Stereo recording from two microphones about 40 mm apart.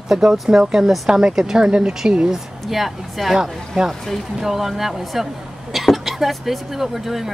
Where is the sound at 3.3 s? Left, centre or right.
Centre.